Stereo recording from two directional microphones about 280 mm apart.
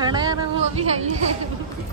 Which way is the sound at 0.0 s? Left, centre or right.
Centre.